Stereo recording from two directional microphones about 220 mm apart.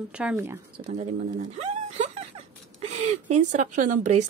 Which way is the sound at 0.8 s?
30° right (ahead or behind).